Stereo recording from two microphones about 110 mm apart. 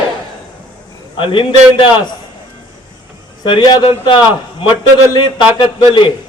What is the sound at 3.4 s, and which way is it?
A man's voice, 45° left (ahead or behind).